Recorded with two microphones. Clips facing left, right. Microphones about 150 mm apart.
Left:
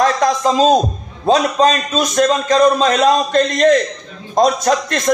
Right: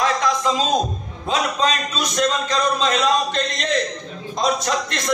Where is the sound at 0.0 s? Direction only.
40° left (ahead or behind).